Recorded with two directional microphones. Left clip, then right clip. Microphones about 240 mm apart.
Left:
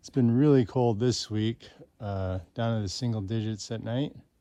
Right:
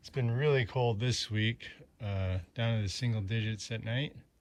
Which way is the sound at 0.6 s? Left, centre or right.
Centre.